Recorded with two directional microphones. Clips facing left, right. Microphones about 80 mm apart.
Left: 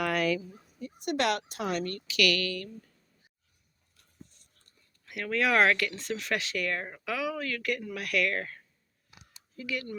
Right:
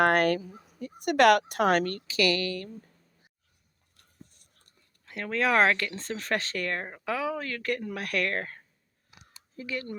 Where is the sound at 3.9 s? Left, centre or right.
Right.